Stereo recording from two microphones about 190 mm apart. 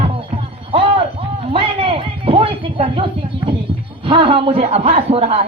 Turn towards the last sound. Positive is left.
turn(degrees=-30)  # may be behind; listen again after turning